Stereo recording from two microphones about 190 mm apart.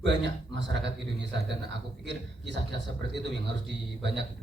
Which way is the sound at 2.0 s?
70° right (ahead or behind).